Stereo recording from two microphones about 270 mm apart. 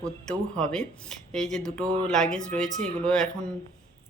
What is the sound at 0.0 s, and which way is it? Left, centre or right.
Speech, centre.